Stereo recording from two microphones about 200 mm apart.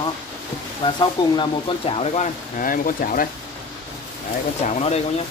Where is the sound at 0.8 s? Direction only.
20° left (ahead or behind); by 3.3 s 45° left (ahead or behind).